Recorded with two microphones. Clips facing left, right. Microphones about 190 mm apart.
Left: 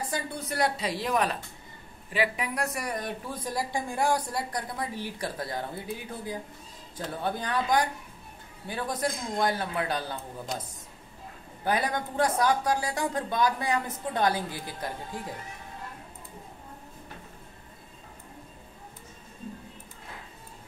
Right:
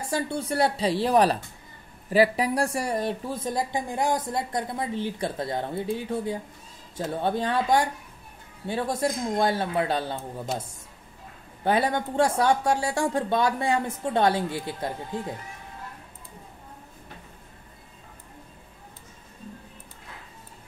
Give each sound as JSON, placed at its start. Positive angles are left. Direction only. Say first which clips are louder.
{"t": 0.0, "sound": "speech", "louder": "right 5 dB", "side_deg": -30}
{"t": 11.6, "sound": "speech", "louder": "right 4 dB", "side_deg": -25}